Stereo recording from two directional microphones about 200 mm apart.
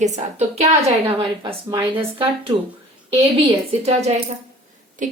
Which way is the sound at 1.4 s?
20° right (ahead or behind).